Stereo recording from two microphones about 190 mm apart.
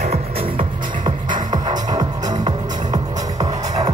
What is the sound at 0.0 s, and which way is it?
Music, 30° right (ahead or behind).